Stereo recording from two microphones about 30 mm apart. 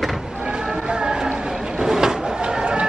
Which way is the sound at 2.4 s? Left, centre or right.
Right.